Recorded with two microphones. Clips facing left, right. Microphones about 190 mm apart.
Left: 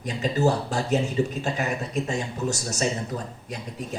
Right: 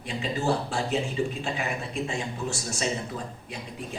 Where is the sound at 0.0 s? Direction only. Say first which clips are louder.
Left 5 dB; 40° left (ahead or behind).